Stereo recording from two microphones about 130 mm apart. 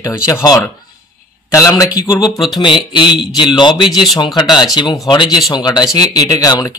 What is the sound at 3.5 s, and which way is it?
Speech, 35° left (ahead or behind).